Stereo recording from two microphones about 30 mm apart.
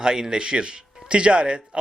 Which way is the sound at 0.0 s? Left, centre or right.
Right.